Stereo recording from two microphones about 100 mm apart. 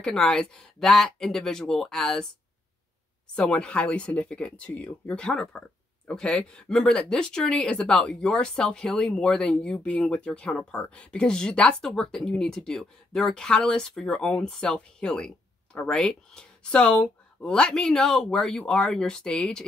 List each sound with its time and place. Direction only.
0.0 s speech: 5° left (ahead or behind)
3.3 s speech: 10° left (ahead or behind)